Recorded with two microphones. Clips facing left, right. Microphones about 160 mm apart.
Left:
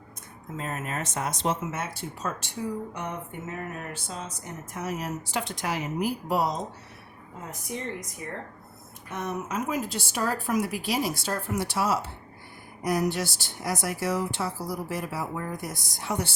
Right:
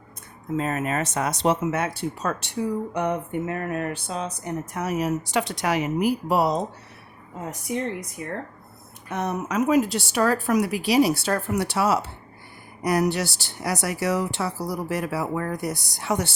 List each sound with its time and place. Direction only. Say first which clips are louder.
0.5 s speech: right 8 dB; 90° right; by 6.6 s 70° right (ahead or behind)
9.0 s speech: right 5 dB; 75° right (ahead or behind)